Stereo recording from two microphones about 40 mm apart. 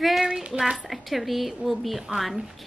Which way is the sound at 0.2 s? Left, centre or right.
Right.